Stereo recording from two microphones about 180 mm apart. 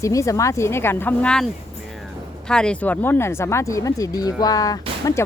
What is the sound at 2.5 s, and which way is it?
Speech, 5° left (ahead or behind).